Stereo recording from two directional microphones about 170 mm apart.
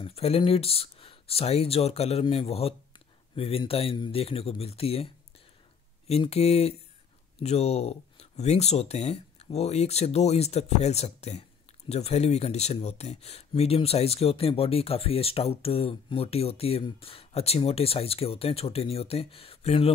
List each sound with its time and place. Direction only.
0.0 s speech: 35° left (ahead or behind)
6.0 s speech: 35° left (ahead or behind)